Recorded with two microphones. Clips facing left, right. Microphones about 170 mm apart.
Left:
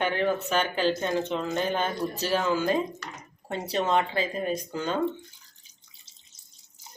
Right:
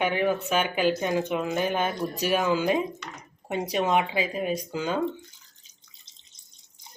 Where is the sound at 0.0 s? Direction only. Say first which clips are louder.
Right 1 dB; 10° right (ahead or behind).